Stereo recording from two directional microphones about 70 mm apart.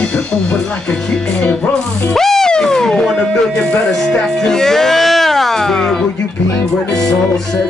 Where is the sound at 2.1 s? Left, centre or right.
Centre.